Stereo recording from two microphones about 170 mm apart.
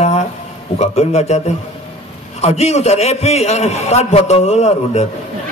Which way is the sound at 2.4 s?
40° left (ahead or behind).